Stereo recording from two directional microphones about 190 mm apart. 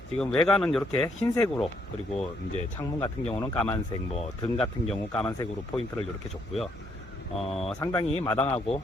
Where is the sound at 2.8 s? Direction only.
15° left (ahead or behind).